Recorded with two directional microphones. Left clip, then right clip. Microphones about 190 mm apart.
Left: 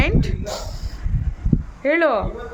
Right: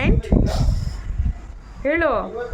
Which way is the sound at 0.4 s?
20° right (ahead or behind).